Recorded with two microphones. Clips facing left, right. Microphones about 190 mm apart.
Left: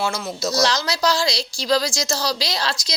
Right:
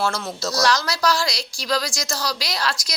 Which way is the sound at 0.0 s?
10° left (ahead or behind).